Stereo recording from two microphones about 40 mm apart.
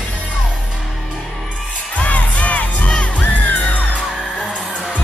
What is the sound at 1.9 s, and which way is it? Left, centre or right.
Crowd, left.